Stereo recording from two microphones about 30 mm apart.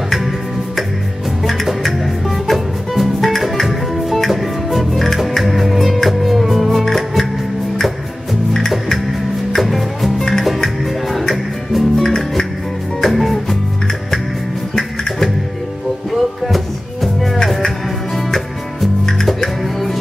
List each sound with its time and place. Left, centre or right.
1.7 s music: centre
8.5 s music: centre
9.6 s music: centre
10.1 s music: centre
11.1 s music: centre
13.1 s music: centre
14.8 s music: centre
16.1 s music: centre
19.6 s music: centre